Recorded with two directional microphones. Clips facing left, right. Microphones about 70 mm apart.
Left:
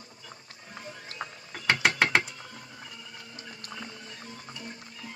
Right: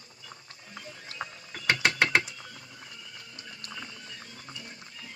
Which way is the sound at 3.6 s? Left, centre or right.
Left.